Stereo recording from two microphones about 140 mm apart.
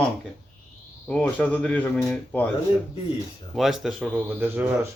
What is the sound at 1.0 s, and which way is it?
Speech, 10° left (ahead or behind).